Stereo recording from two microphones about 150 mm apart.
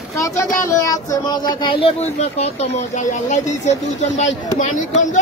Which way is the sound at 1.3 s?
35° left (ahead or behind).